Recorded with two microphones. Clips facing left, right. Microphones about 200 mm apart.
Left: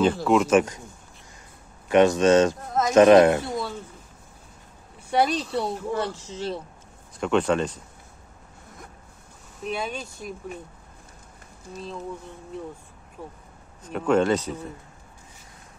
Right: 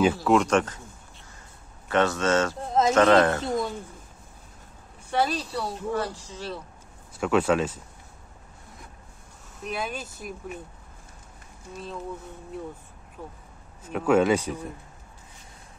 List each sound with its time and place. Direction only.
0.0 s speech: 5° right (ahead or behind)
1.9 s speech: 15° left (ahead or behind)
2.6 s speech: 25° right (ahead or behind)
2.9 s speech: 15° left (ahead or behind)
3.4 s a sound: 20° right (ahead or behind)
5.1 s speech: 15° left (ahead or behind)
7.2 s speech: 5° right (ahead or behind)
9.6 s speech: centre (ahead or behind)
13.8 s speech: 5° right (ahead or behind)